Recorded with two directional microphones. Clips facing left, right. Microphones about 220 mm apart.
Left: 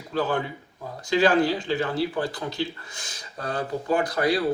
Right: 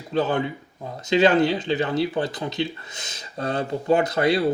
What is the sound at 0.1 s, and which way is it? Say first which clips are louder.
Speech: right 3 dB; 20° right (ahead or behind).